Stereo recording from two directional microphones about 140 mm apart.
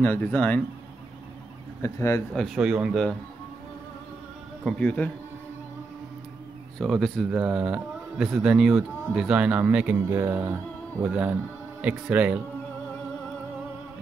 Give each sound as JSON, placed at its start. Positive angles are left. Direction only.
{"t": 0.0, "sound": "speech", "side_deg": 15}
{"t": 1.8, "sound": "speech", "side_deg": 20}
{"t": 2.3, "sound": "speech", "side_deg": 0}
{"t": 4.6, "sound": "speech", "side_deg": 5}
{"t": 6.8, "sound": "speech", "side_deg": 0}
{"t": 7.3, "sound": "speech", "side_deg": -10}